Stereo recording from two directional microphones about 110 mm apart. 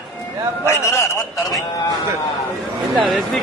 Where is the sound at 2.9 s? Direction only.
Centre (ahead or behind).